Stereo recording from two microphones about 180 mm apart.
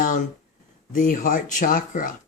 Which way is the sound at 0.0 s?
45° left (ahead or behind).